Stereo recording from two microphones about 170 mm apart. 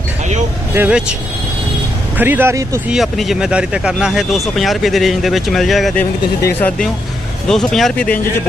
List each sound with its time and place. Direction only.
0.8 s speech: 5° right (ahead or behind)
2.1 s speech: 10° right (ahead or behind)
2.9 s speech: centre (ahead or behind)
6.0 s speech: 10° left (ahead or behind)